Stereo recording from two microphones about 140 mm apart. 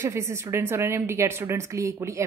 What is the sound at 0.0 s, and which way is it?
A woman's voice, 20° right (ahead or behind).